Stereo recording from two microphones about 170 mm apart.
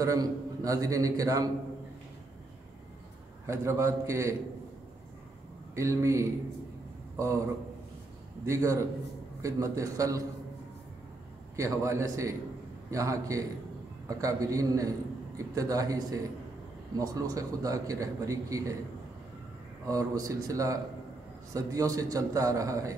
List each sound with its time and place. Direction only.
0.0 s a man's voice: 20° right (ahead or behind)
3.4 s a man's voice: 15° right (ahead or behind)
5.8 s a man's voice: 15° right (ahead or behind)
8.5 s a man's voice: 20° right (ahead or behind)
11.5 s a man's voice: 15° right (ahead or behind)
19.9 s a man's voice: 20° right (ahead or behind)